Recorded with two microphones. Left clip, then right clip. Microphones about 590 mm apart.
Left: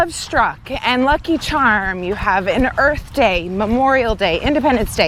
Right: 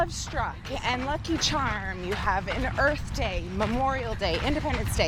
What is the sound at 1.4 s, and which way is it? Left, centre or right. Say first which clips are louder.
Speech: left 8 dB; left.